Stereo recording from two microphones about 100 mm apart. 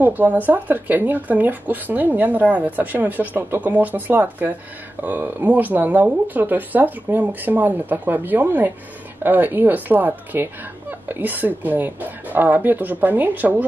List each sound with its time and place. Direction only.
0.0 s speech: 20° right (ahead or behind)